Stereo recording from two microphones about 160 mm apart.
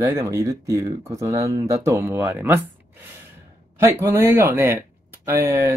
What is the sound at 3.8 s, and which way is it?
Speech, 15° right (ahead or behind).